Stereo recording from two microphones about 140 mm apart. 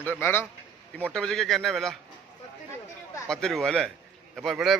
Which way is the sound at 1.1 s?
5° left (ahead or behind).